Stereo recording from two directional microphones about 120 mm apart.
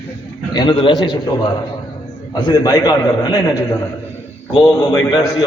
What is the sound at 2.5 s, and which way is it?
A man's voice, 35° left (ahead or behind).